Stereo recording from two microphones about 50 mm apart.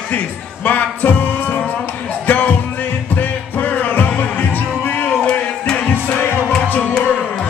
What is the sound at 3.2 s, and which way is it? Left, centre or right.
Music, left.